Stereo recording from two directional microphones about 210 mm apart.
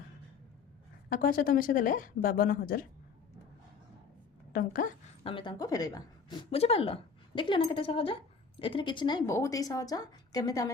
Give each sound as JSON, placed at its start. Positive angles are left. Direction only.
{"t": 1.1, "sound": "speech", "side_deg": 40}
{"t": 4.5, "sound": "speech", "side_deg": 40}
{"t": 5.2, "sound": "a woman's voice", "side_deg": 25}